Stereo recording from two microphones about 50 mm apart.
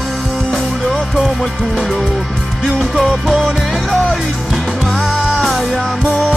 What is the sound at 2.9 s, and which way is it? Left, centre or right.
Music, centre.